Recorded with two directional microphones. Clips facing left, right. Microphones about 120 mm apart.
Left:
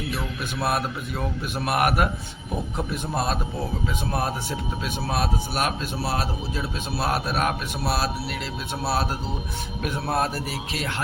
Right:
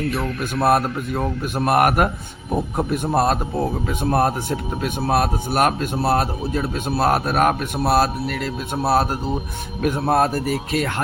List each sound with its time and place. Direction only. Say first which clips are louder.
0.2 s a man's voice: right 7 dB; 50° right (ahead or behind)